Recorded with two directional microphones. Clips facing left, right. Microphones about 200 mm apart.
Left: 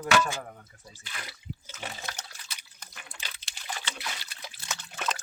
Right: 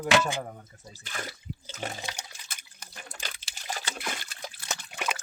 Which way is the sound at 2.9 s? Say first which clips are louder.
Right 4 dB; 40° right (ahead or behind).